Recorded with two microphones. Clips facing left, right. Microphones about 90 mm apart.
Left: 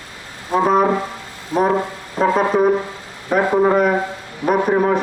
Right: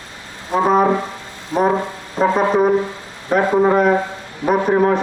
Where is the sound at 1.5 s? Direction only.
20° right (ahead or behind).